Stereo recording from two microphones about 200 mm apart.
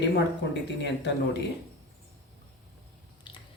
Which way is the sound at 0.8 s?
60° left (ahead or behind).